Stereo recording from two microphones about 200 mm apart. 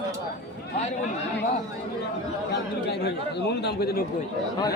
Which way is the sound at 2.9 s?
55° left (ahead or behind).